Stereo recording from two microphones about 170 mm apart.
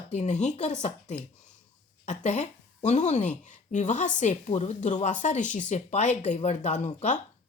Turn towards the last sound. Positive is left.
turn(degrees=45)  # may be behind; listen again after turning